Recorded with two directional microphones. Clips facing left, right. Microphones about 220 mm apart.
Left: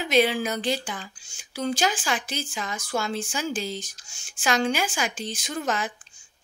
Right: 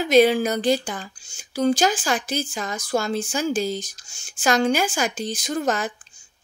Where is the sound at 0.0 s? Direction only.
40° right (ahead or behind).